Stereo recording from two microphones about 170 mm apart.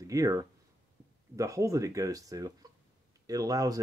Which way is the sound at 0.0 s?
20° right (ahead or behind).